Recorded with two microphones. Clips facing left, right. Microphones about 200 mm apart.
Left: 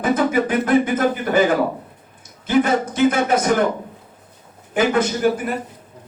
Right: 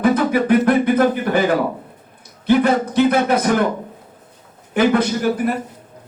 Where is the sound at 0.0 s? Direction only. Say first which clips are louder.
Right 2 dB; 55° right (ahead or behind).